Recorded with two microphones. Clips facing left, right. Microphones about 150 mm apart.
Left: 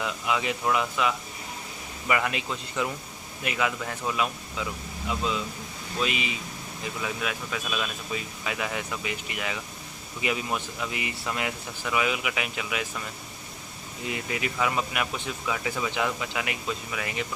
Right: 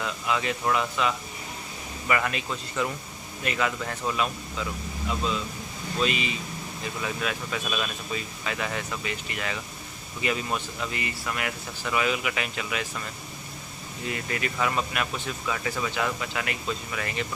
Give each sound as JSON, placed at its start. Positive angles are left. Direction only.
{"t": 0.0, "sound": "speech", "side_deg": 15}
{"t": 11.2, "sound": "speech", "side_deg": 20}
{"t": 11.9, "sound": "speech", "side_deg": 10}